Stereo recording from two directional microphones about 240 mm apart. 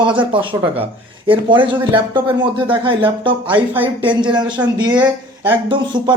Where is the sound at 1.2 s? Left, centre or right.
Right.